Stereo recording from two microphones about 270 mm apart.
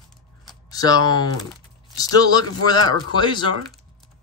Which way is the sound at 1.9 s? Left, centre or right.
Centre.